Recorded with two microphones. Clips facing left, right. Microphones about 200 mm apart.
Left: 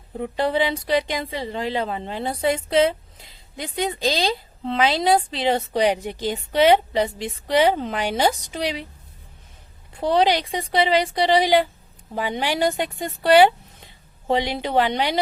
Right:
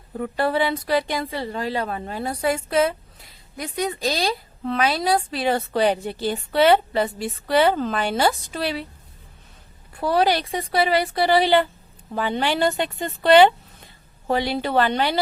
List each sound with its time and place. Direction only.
0.2 s a woman's voice: 20° left (ahead or behind)
10.0 s a woman's voice: 20° left (ahead or behind)